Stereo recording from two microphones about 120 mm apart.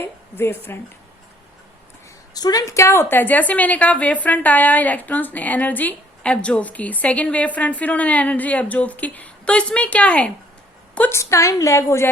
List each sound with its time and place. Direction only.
0.0 s speech: 20° left (ahead or behind)
2.3 s a woman's voice: 35° left (ahead or behind); by 11.2 s 15° left (ahead or behind)
11.2 s a woman's voice: 25° left (ahead or behind)